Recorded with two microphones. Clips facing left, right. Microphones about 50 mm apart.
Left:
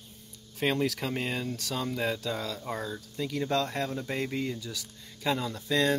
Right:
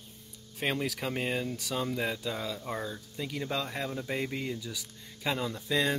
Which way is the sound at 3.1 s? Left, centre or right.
Centre.